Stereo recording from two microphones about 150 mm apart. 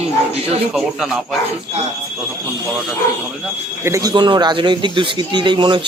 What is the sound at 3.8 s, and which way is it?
Speech, 25° right (ahead or behind).